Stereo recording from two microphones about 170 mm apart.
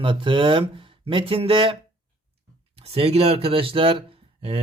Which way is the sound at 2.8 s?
35° right (ahead or behind).